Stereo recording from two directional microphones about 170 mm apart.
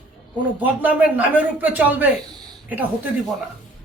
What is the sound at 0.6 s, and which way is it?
Speech, 10° right (ahead or behind).